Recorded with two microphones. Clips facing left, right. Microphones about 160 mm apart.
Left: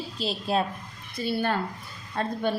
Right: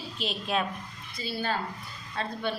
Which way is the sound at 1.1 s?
55° left (ahead or behind).